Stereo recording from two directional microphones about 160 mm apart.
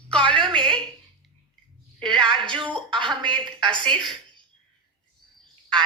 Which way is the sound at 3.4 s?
5° left (ahead or behind).